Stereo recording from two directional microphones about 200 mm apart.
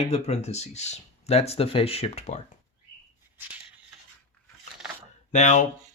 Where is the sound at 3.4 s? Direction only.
10° right (ahead or behind).